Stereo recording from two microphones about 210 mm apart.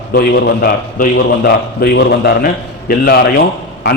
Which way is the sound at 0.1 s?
50° left (ahead or behind).